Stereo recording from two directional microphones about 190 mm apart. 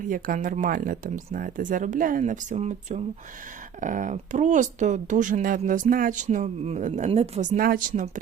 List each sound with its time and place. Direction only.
0.1 s speech: 45° right (ahead or behind)